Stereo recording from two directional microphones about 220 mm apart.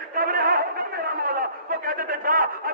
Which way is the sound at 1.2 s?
40° right (ahead or behind).